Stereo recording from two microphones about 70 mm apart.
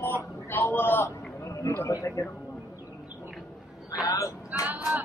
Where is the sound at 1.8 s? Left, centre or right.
Left.